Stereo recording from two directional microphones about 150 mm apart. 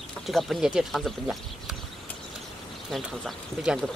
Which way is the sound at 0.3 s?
Centre (ahead or behind).